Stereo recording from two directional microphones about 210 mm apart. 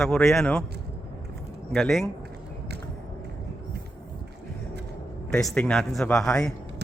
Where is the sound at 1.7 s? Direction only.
Centre (ahead or behind).